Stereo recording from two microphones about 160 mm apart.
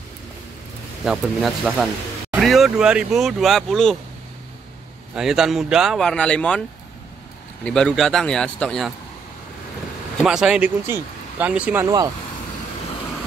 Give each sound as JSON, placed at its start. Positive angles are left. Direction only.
{"t": 1.0, "sound": "speech", "side_deg": -5}
{"t": 5.1, "sound": "speech", "side_deg": -5}
{"t": 7.6, "sound": "speech", "side_deg": 5}
{"t": 10.2, "sound": "speech", "side_deg": -5}
{"t": 11.8, "sound": "speech", "side_deg": -25}